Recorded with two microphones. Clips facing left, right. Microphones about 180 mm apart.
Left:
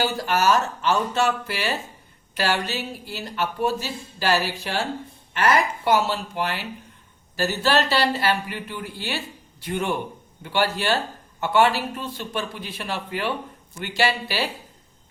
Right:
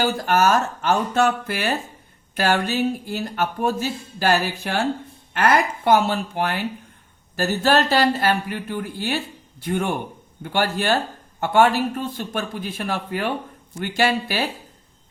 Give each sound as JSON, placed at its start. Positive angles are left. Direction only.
{"t": 0.0, "sound": "speech", "side_deg": -50}